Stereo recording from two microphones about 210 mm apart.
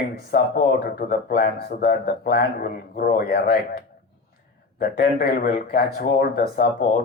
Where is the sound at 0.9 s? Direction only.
45° left (ahead or behind).